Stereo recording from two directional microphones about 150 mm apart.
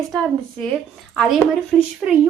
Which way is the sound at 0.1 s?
Centre (ahead or behind).